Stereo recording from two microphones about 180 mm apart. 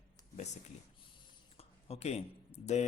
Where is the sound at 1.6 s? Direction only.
35° left (ahead or behind).